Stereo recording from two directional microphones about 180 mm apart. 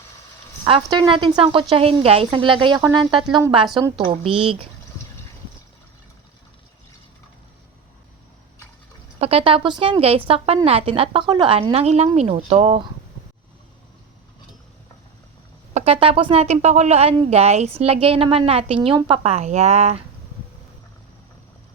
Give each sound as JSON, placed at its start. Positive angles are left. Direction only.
{"t": 0.6, "sound": "speech", "side_deg": -25}
{"t": 9.1, "sound": "speech", "side_deg": -30}
{"t": 15.7, "sound": "speech", "side_deg": -35}